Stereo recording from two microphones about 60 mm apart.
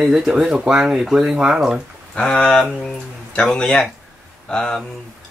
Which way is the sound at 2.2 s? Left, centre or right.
Centre.